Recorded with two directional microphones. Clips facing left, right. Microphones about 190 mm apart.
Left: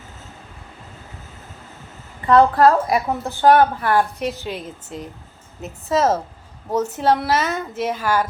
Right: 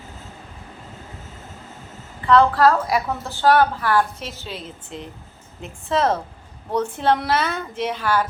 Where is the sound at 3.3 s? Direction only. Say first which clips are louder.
Left 3 dB; 20° left (ahead or behind).